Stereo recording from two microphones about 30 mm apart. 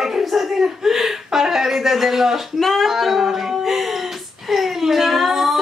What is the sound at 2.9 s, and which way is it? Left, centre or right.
Music, centre.